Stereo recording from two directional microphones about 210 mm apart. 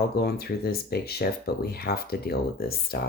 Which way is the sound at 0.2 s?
50° left (ahead or behind).